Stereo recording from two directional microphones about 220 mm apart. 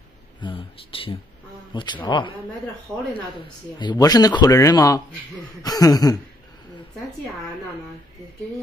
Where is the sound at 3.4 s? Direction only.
20° left (ahead or behind).